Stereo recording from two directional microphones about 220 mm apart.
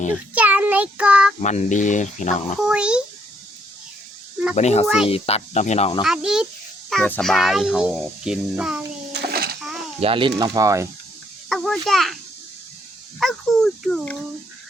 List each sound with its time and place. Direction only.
0.3 s child singing: 5° right (ahead or behind)
1.4 s speech: 30° left (ahead or behind)
2.6 s a child's voice: 5° right (ahead or behind)
4.5 s speech: 30° left (ahead or behind)
6.0 s a child's voice: centre (ahead or behind)
9.1 s a sound: 45° right (ahead or behind)
10.0 s speech: 25° right (ahead or behind)
11.4 s a child's voice: centre (ahead or behind)